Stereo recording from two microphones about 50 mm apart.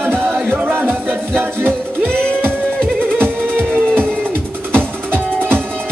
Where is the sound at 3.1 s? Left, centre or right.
Right.